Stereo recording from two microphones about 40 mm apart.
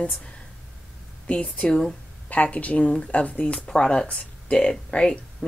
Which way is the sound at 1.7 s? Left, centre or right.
Centre.